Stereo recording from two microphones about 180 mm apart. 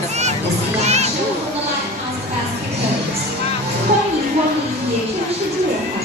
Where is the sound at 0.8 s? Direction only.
40° right (ahead or behind).